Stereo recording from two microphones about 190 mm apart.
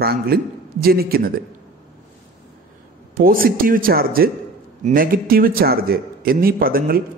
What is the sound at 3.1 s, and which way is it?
A man's voice, 50° right (ahead or behind).